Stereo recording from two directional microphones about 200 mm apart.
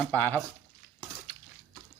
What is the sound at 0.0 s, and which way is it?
Speech, 10° left (ahead or behind).